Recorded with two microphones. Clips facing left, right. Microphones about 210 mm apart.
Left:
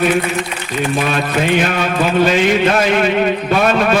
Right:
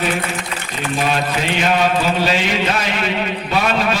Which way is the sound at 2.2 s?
50° left (ahead or behind).